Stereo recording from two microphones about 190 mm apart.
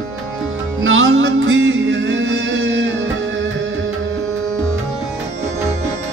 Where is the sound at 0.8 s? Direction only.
90° right.